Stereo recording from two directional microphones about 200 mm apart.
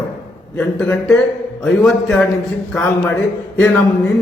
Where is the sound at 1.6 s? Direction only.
5° left (ahead or behind).